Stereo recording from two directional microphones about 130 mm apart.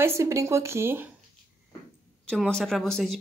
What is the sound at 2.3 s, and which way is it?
Speech, 5° left (ahead or behind).